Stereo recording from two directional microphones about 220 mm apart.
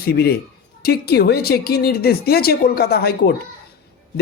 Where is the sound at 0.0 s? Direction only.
45° left (ahead or behind).